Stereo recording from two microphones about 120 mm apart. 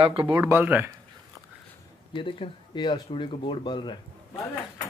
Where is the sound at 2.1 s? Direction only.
45° left (ahead or behind).